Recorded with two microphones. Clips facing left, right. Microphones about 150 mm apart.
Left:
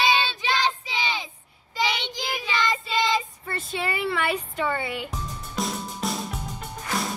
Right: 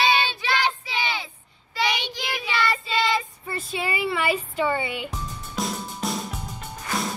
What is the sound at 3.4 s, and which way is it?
Speech, 5° right (ahead or behind).